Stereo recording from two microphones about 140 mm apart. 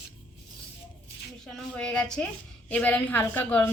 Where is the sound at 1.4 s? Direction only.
5° left (ahead or behind).